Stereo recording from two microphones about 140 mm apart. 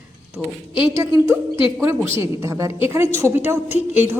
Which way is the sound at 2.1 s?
20° right (ahead or behind).